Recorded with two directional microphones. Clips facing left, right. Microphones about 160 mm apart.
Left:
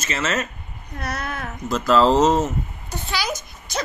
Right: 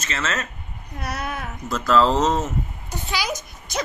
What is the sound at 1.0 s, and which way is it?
Speech, 10° right (ahead or behind).